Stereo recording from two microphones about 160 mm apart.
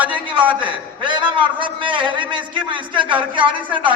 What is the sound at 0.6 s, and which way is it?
A man's voice, 30° right (ahead or behind).